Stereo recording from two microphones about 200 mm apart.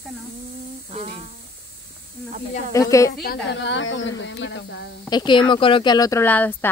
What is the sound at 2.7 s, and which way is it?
Speech, 15° left (ahead or behind).